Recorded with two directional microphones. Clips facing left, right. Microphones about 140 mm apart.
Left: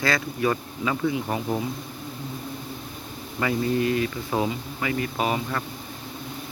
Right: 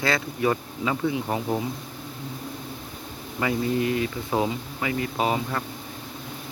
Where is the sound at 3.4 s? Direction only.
20° right (ahead or behind).